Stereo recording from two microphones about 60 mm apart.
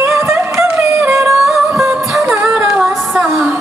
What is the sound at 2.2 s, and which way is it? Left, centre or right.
Singing, centre.